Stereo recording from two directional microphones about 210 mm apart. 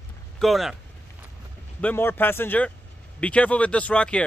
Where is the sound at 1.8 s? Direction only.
10° left (ahead or behind).